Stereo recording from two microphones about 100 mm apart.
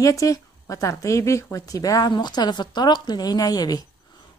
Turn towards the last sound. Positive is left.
turn(degrees=40)  # may be behind; listen again after turning